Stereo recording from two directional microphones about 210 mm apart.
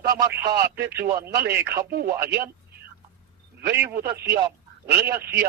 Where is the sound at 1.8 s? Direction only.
50° right (ahead or behind).